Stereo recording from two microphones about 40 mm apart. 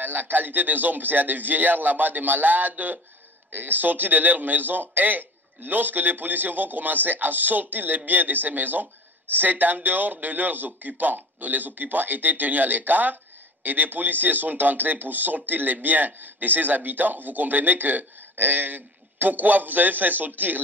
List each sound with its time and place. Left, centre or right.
0.0 s speech: right